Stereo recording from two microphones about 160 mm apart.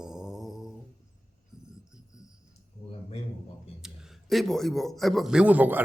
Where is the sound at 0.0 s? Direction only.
5° right (ahead or behind).